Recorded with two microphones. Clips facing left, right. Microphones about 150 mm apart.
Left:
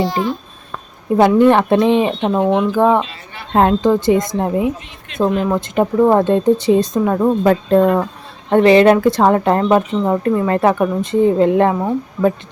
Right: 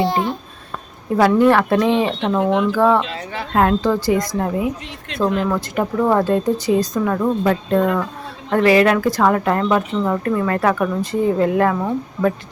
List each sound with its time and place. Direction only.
0.0 s a child's voice: 25° right (ahead or behind)
1.4 s speech: 20° left (ahead or behind)
7.4 s speech: 35° left (ahead or behind)
8.4 s speech: 25° left (ahead or behind)